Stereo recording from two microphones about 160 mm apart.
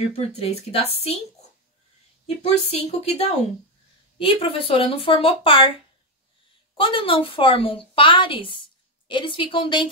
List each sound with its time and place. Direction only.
0.1 s a woman's voice: 40° left (ahead or behind)
2.2 s a woman's voice: 40° left (ahead or behind)
6.8 s a woman's voice: 35° left (ahead or behind)